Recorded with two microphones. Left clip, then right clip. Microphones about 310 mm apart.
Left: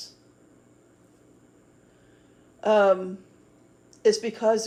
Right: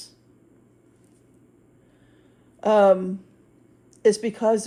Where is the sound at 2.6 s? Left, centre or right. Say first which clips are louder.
Right 3 dB; right.